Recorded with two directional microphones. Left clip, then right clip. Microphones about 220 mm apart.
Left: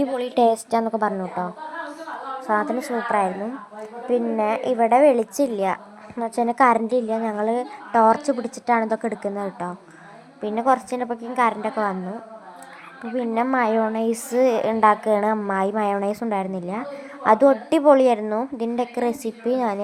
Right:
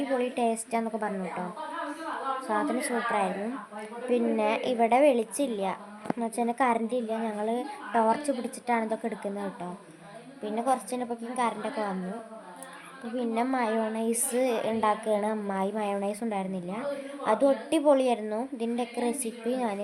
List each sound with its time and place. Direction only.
0.2 s a woman's voice: 30° left (ahead or behind)
2.5 s a woman's voice: 5° left (ahead or behind)
4.1 s a woman's voice: 5° left (ahead or behind)
5.0 s a woman's voice: 10° left (ahead or behind)
13.1 s a woman's voice: 15° left (ahead or behind)